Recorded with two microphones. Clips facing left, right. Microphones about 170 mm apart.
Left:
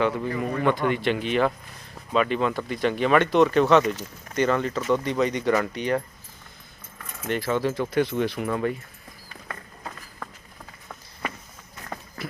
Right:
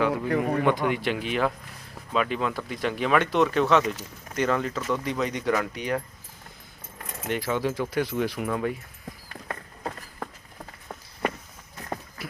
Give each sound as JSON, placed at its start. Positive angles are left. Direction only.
{"t": 0.3, "sound": "a man's voice", "side_deg": -65}
{"t": 0.6, "sound": "speech", "side_deg": -15}
{"t": 7.3, "sound": "speech", "side_deg": -10}
{"t": 9.5, "sound": "run", "side_deg": -35}